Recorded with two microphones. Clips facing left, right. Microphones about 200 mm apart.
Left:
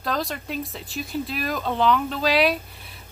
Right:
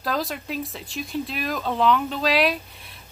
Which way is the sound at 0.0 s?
Centre (ahead or behind).